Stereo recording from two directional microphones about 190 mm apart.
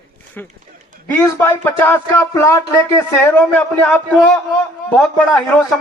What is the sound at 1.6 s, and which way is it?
Speech, 10° left (ahead or behind).